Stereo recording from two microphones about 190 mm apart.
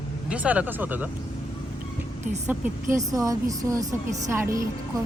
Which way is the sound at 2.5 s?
10° right (ahead or behind).